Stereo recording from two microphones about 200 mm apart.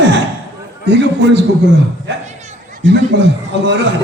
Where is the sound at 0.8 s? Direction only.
60° right (ahead or behind).